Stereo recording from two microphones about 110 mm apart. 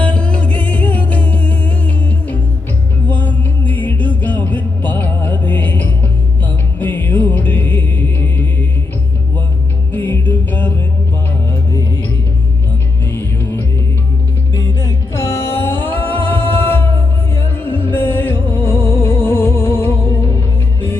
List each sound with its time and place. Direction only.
0.0 s music: 10° left (ahead or behind)
9.9 s music: 15° left (ahead or behind)
13.1 s music: 20° left (ahead or behind)
15.3 s music: 20° left (ahead or behind)